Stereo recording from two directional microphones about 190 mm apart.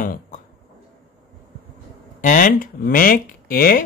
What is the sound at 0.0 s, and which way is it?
Speech, 45° left (ahead or behind).